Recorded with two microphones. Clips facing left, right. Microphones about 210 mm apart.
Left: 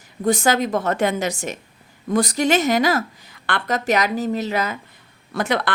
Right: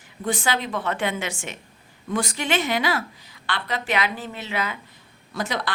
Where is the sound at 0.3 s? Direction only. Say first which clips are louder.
Left 7 dB; 45° left (ahead or behind).